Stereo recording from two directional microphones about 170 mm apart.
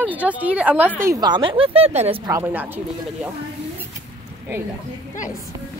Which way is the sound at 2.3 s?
15° right (ahead or behind).